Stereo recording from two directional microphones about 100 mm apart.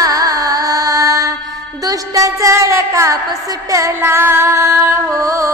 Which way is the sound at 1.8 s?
35° right (ahead or behind).